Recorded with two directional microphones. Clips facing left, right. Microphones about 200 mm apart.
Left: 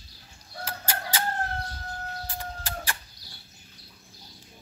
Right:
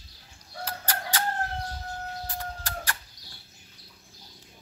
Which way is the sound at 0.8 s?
25° left (ahead or behind).